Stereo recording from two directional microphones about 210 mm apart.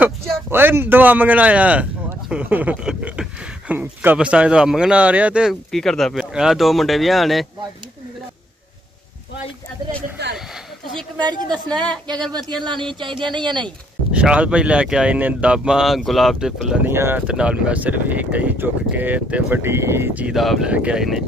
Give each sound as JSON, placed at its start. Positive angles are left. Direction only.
{"t": 0.0, "sound": "speech", "side_deg": -10}
{"t": 10.3, "sound": "a sound", "side_deg": 0}
{"t": 11.1, "sound": "speech", "side_deg": -20}
{"t": 13.0, "sound": "speech", "side_deg": -20}
{"t": 13.7, "sound": "speech", "side_deg": -5}